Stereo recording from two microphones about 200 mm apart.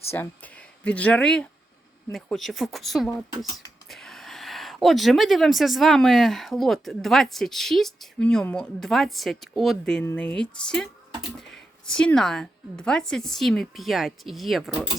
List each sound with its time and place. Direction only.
0.1 s speech: 10° left (ahead or behind)